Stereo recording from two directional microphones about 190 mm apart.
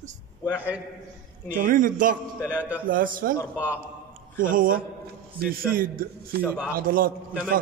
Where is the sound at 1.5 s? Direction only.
45° right (ahead or behind).